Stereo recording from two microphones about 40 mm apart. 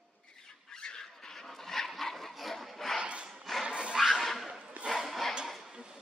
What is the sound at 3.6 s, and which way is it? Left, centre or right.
Music, right.